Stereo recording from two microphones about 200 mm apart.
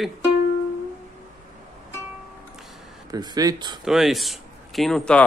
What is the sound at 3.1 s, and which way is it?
Speech, 20° right (ahead or behind).